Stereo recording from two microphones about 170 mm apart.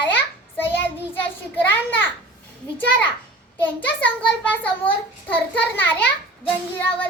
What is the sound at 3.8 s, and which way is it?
A child's voice, 10° left (ahead or behind).